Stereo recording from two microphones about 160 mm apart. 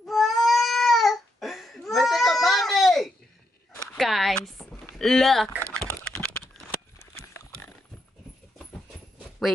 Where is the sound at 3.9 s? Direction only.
Centre (ahead or behind).